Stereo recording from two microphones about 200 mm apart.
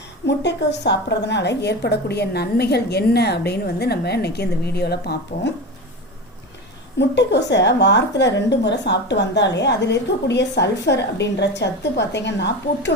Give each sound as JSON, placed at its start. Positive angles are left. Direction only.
{"t": 0.3, "sound": "a woman's voice", "side_deg": 60}
{"t": 7.0, "sound": "a woman's voice", "side_deg": 60}